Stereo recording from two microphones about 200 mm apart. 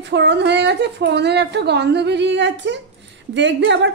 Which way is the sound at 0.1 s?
60° right (ahead or behind).